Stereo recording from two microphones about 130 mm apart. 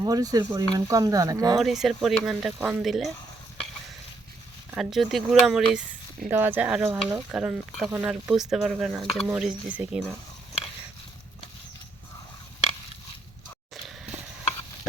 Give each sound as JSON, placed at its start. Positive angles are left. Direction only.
{"t": 0.0, "sound": "speech", "side_deg": -30}
{"t": 1.5, "sound": "speech", "side_deg": 0}
{"t": 4.7, "sound": "speech", "side_deg": 0}
{"t": 6.3, "sound": "speech", "side_deg": -15}